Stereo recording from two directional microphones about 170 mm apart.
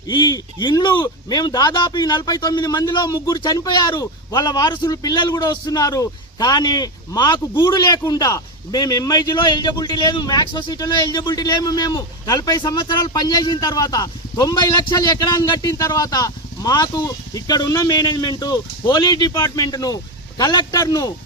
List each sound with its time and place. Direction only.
0.1 s a man's voice: 25° left (ahead or behind)